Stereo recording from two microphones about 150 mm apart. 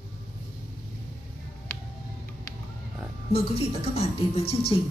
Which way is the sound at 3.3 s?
40° left (ahead or behind).